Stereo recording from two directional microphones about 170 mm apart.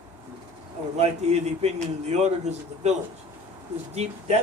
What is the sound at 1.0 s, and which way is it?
Speech, 40° right (ahead or behind).